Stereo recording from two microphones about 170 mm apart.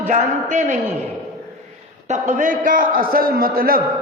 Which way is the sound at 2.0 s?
45° right (ahead or behind).